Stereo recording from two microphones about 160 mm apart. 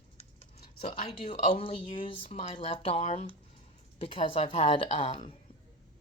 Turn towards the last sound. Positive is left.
turn(degrees=35)  # may be behind; listen again after turning